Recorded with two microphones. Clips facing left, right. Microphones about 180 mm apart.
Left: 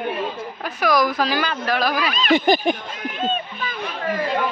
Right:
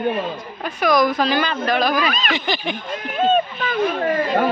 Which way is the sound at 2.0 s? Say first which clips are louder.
Right 2 dB; 45° right (ahead or behind).